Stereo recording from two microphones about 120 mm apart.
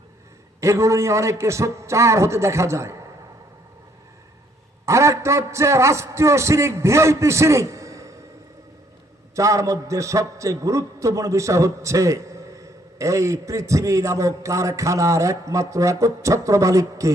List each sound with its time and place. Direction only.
0.6 s a man's voice: 25° right (ahead or behind)
4.9 s a man's voice: 25° right (ahead or behind)
9.3 s a man's voice: 25° right (ahead or behind)